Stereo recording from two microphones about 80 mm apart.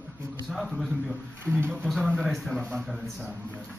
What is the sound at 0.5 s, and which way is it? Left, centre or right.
A man's voice, centre.